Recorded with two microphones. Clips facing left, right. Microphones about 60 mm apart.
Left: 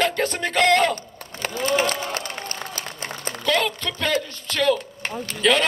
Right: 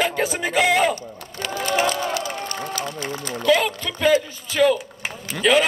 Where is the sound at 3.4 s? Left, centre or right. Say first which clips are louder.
Right 3 dB; centre.